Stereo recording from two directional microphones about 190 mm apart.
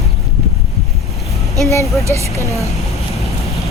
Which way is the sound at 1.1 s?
Centre (ahead or behind).